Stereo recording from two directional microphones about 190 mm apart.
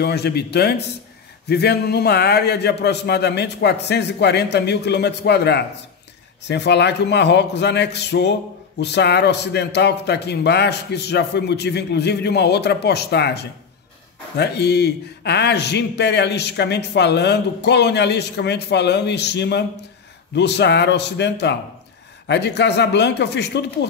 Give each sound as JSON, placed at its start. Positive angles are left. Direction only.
{"t": 0.0, "sound": "a man's voice", "side_deg": 60}